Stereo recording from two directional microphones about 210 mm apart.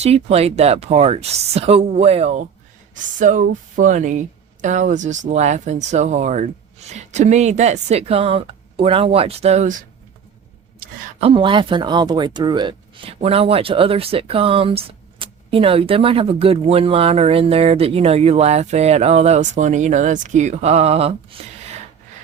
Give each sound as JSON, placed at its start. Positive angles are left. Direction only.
{"t": 0.0, "sound": "speech", "side_deg": -30}
{"t": 11.2, "sound": "speech", "side_deg": -25}